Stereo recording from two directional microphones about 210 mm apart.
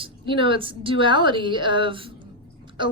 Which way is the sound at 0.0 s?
25° right (ahead or behind).